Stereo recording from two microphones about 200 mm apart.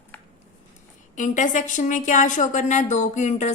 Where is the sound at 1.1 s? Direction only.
40° left (ahead or behind).